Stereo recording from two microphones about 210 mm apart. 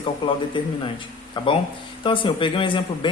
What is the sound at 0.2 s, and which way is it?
Speech, 25° left (ahead or behind).